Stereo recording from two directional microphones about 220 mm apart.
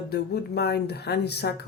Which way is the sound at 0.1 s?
45° left (ahead or behind).